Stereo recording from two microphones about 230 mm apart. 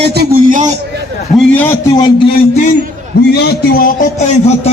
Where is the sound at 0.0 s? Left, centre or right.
Right.